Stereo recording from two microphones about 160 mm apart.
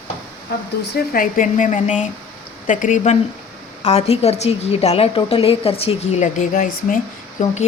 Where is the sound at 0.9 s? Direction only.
60° left (ahead or behind).